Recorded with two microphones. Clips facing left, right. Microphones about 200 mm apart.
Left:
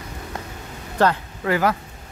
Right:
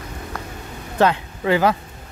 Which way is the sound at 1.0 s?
20° right (ahead or behind).